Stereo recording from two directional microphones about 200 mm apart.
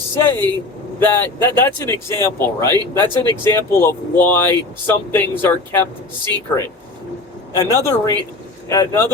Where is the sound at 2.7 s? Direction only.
20° right (ahead or behind).